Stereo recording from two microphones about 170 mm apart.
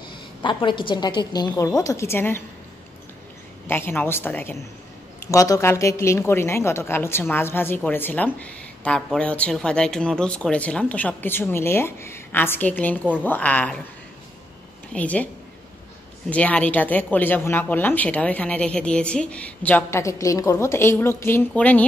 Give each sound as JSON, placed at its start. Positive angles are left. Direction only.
{"t": 0.1, "sound": "a woman's voice", "side_deg": 30}
{"t": 3.6, "sound": "a woman's voice", "side_deg": 15}
{"t": 14.9, "sound": "speech", "side_deg": 10}
{"t": 16.3, "sound": "a woman's voice", "side_deg": 10}